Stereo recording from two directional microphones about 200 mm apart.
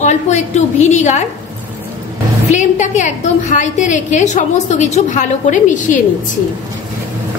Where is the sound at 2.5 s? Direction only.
35° left (ahead or behind).